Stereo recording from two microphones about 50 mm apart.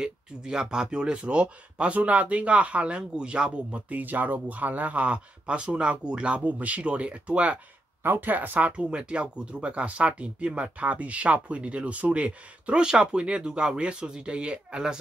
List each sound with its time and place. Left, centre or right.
0.0 s speech: centre
8.0 s speech: right; by 15.0 s centre